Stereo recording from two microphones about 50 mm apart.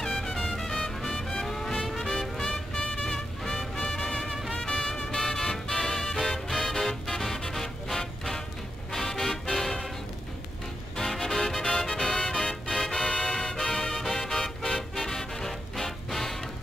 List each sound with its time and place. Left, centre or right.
0.0 s music: centre
11.0 s music: centre